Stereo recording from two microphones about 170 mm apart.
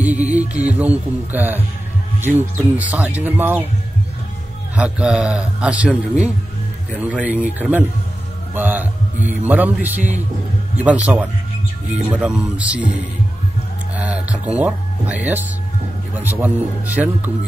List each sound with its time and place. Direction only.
0.2 s music: 40° right (ahead or behind)
0.5 s speech: 10° right (ahead or behind)
4.7 s speech: 5° right (ahead or behind)
13.9 s speech: 5° right (ahead or behind)